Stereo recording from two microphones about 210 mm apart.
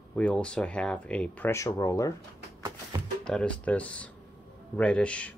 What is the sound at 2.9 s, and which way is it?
Music, 15° right (ahead or behind).